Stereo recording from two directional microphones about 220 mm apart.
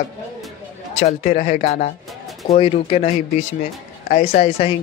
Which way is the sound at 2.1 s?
Centre (ahead or behind).